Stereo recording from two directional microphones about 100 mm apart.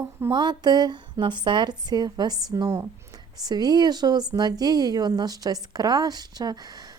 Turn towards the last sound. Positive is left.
turn(degrees=-40)  # may be behind; listen again after turning